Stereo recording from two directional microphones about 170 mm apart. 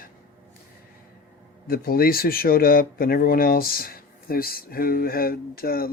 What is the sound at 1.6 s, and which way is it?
Speech, 60° left (ahead or behind).